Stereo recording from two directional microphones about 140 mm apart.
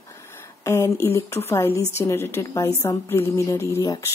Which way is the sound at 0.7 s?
20° left (ahead or behind).